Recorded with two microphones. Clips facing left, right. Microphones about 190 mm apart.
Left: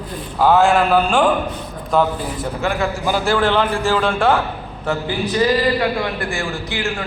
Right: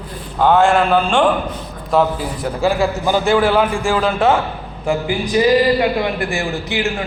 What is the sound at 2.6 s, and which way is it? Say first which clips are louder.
Speech: right 5 dB; 30° right (ahead or behind).